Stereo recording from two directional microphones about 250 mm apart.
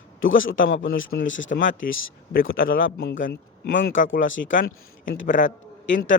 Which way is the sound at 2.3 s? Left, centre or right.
Left.